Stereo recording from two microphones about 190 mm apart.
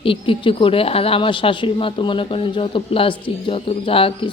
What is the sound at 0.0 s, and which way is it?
Speech, 30° left (ahead or behind).